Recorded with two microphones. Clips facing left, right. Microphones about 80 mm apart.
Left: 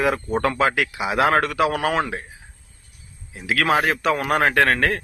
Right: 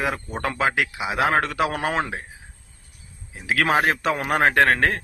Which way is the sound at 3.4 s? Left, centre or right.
Right.